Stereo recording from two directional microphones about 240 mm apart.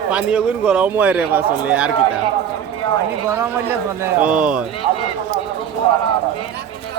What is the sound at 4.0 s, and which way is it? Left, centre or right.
Speech, centre.